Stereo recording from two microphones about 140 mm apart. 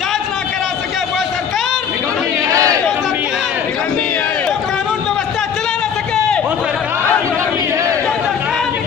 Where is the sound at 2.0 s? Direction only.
25° right (ahead or behind).